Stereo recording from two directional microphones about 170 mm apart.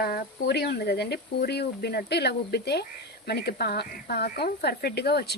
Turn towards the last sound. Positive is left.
turn(degrees=70)  # may be behind; listen again after turning